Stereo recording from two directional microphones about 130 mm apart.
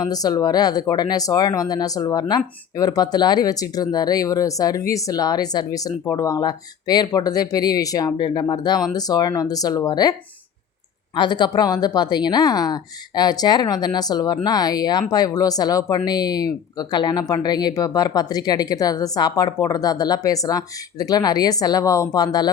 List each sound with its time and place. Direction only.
0.0 s a woman's voice: 30° left (ahead or behind)